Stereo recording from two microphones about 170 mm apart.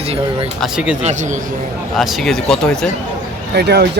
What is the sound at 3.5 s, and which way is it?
Speech, 75° right (ahead or behind).